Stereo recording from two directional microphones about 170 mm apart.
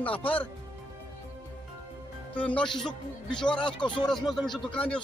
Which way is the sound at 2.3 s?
10° left (ahead or behind).